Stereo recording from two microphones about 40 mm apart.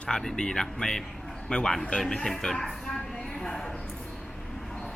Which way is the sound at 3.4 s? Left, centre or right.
Centre.